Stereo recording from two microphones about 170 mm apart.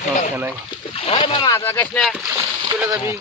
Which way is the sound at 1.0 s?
35° left (ahead or behind).